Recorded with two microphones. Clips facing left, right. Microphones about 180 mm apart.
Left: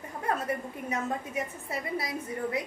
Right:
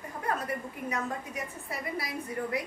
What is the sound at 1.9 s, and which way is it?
Speech, 25° left (ahead or behind).